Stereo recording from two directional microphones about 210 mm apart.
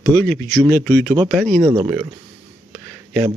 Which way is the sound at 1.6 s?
20° right (ahead or behind).